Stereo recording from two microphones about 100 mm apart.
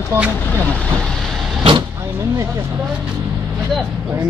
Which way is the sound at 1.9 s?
30° right (ahead or behind).